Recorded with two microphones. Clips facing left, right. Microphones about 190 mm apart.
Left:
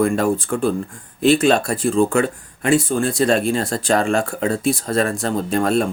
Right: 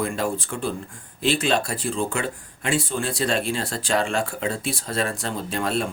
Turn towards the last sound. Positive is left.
turn(degrees=45)  # may be behind; listen again after turning